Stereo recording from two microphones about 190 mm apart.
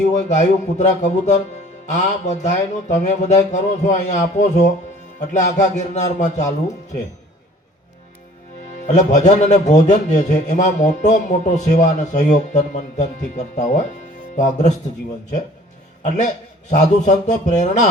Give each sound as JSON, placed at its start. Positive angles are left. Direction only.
{"t": 0.3, "sound": "a man's voice", "side_deg": 40}
{"t": 9.0, "sound": "a man's voice", "side_deg": 40}
{"t": 16.0, "sound": "a man's voice", "side_deg": 40}